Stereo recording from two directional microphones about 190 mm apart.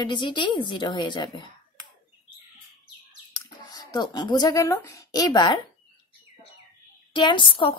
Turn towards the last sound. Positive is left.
turn(degrees=25)  # may be behind; listen again after turning